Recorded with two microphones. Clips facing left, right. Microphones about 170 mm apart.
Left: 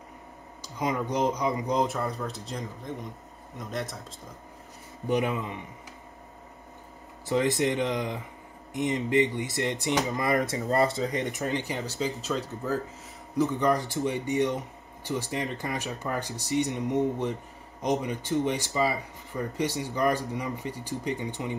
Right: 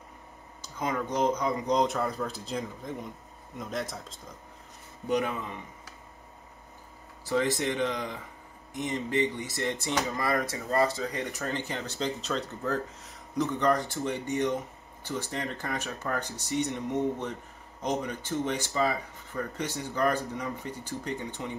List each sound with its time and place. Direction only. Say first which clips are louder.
0.6 s speech: left 2 dB; 15° left (ahead or behind)
7.2 s speech: left 3 dB; 15° left (ahead or behind)